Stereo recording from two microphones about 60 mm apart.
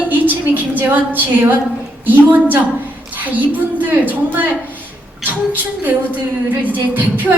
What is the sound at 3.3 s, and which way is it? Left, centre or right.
A woman's voice, right.